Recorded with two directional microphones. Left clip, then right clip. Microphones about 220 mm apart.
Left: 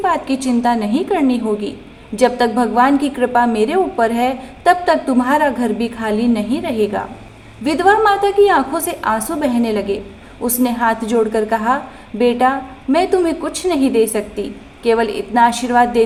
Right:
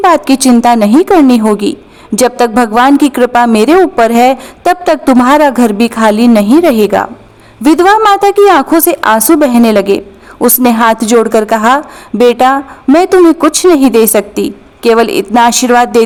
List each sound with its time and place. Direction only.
0.0 s a woman's voice: 50° right (ahead or behind)